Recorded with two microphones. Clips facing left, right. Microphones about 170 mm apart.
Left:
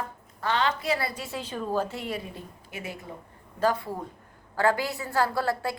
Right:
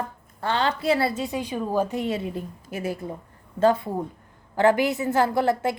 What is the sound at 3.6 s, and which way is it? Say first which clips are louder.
A woman's voice: right 6 dB; 20° right (ahead or behind).